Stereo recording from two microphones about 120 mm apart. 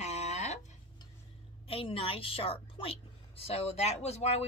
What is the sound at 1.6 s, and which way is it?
Speech, 50° left (ahead or behind).